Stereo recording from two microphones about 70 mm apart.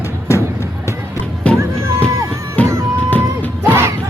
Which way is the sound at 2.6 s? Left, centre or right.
Left.